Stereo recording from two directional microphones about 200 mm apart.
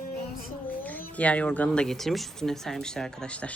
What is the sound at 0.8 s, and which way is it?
Speech, 10° left (ahead or behind).